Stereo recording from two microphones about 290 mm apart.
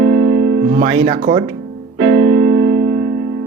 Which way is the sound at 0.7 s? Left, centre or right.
Centre.